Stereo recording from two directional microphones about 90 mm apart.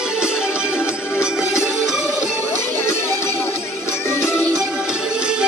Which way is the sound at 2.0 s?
30° left (ahead or behind).